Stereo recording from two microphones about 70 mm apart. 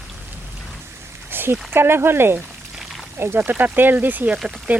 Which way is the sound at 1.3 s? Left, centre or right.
Right.